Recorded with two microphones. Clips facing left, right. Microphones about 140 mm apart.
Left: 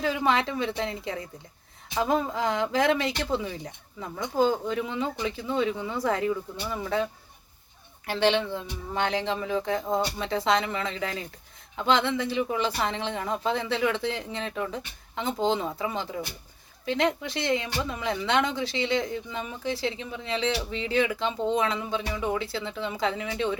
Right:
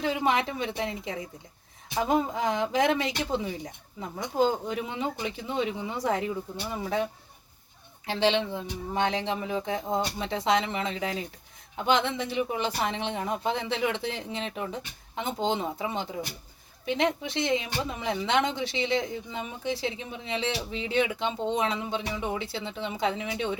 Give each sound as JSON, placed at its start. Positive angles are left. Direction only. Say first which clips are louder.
{"t": 0.0, "sound": "speech", "louder": "left 1 dB", "side_deg": -20}
{"t": 8.3, "sound": "speech", "louder": "left 1 dB", "side_deg": -20}